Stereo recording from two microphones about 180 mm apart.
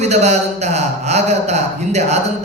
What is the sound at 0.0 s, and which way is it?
A man's voice, 40° right (ahead or behind).